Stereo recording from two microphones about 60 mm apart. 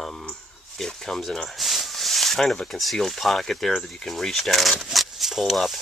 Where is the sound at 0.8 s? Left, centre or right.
Centre.